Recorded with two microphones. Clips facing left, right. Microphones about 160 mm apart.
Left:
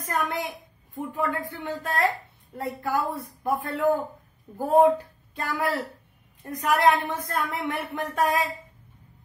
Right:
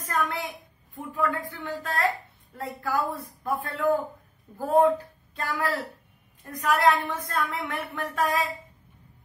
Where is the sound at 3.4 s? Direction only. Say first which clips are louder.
Left 2 dB; 20° left (ahead or behind).